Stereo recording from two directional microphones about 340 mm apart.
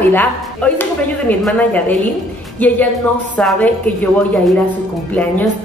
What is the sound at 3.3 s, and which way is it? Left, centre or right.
A woman's voice, centre.